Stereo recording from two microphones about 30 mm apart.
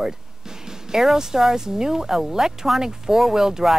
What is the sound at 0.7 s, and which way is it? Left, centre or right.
Speech, centre.